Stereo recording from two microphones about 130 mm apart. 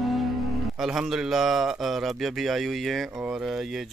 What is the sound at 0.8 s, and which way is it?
Speech, 5° right (ahead or behind).